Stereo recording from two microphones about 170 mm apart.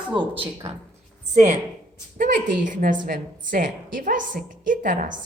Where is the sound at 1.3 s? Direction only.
45° right (ahead or behind).